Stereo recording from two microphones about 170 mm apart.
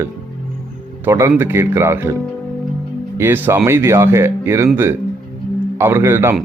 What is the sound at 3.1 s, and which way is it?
Speech, 10° right (ahead or behind).